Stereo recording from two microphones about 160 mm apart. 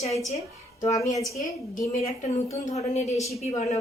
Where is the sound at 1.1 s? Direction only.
20° left (ahead or behind).